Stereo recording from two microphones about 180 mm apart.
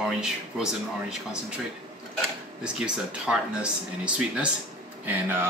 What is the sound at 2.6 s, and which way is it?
Speech, 5° right (ahead or behind).